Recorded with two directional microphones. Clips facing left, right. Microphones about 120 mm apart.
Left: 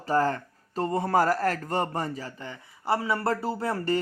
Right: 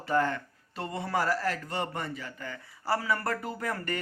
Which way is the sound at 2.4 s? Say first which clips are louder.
Left 1 dB; 20° left (ahead or behind).